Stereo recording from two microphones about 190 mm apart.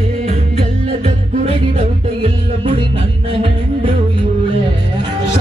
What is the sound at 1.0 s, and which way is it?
Music, 30° right (ahead or behind).